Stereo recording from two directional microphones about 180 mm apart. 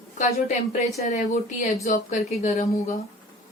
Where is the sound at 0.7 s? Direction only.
45° left (ahead or behind).